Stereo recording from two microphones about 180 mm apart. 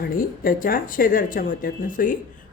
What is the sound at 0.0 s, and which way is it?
Speech, 50° left (ahead or behind).